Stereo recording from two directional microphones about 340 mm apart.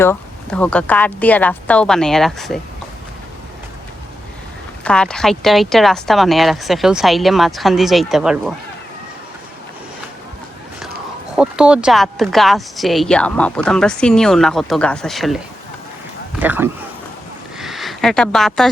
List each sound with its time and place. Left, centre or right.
0.0 s speech: centre
4.8 s speech: centre
11.3 s speech: centre
16.4 s speech: centre